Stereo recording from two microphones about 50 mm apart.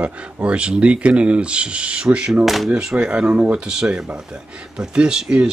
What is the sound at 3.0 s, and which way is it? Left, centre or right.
Speech, centre.